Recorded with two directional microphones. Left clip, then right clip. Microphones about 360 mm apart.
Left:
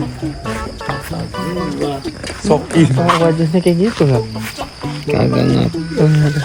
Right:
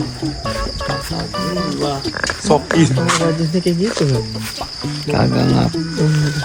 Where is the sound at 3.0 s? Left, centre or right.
Centre.